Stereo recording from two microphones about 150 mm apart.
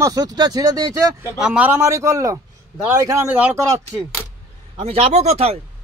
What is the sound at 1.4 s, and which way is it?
A man's voice, 5° right (ahead or behind).